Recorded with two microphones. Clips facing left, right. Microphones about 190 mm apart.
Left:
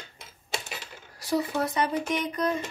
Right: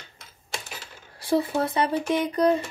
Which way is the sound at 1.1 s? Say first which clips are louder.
Right 4 dB; 30° right (ahead or behind).